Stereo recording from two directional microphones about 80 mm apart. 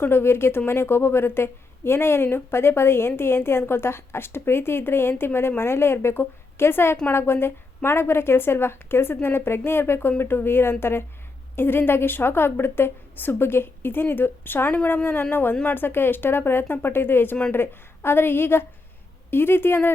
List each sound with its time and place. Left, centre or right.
0.0 s a woman's voice: left